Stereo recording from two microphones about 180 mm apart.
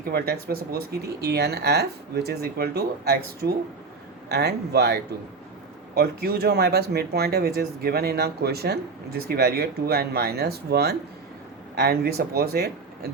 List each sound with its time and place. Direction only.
0.1 s speech: 60° right (ahead or behind)